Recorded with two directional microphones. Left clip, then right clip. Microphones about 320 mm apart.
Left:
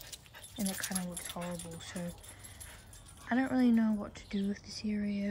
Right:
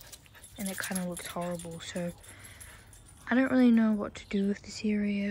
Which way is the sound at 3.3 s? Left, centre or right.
Centre.